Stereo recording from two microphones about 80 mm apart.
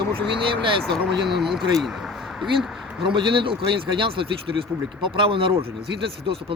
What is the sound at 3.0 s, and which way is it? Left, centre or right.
Speech, right.